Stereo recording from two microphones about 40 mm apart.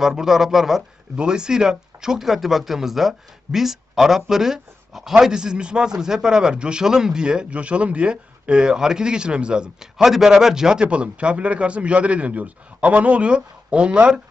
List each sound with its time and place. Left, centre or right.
0.1 s speech: centre
1.1 s speech: right
5.2 s a man's voice: centre
7.4 s speech: right
8.6 s a man's voice: centre